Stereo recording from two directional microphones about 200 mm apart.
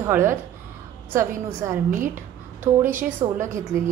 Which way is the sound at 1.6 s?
10° right (ahead or behind).